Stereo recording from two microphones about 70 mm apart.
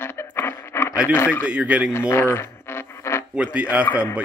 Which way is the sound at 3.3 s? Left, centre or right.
Centre.